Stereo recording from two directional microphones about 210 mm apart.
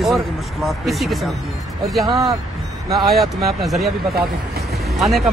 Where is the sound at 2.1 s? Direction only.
15° right (ahead or behind).